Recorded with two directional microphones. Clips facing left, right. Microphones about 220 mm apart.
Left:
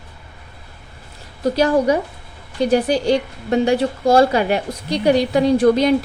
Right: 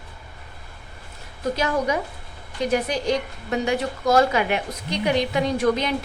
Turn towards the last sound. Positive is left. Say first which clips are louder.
# left 8 dB
turn(degrees=35)  # may be behind; listen again after turning